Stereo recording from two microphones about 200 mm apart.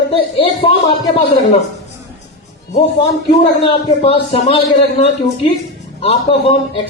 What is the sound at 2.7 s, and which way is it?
A man's voice, 30° left (ahead or behind).